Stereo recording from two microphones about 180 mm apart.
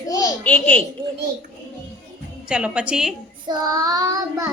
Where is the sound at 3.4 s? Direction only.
20° right (ahead or behind).